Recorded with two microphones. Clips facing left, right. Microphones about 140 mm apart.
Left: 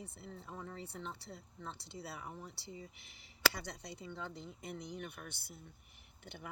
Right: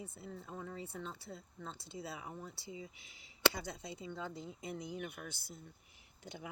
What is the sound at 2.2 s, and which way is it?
Speech, 60° right (ahead or behind).